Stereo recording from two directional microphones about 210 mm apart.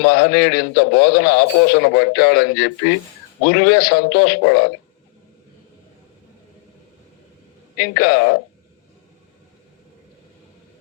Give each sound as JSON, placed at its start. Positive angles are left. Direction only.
{"t": 0.0, "sound": "a man's voice", "side_deg": 50}
{"t": 7.8, "sound": "a man's voice", "side_deg": 50}